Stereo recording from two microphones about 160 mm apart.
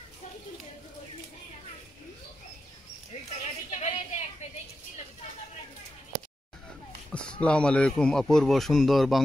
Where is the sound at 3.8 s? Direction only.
40° left (ahead or behind).